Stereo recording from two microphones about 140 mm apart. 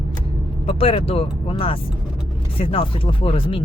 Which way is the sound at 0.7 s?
45° left (ahead or behind).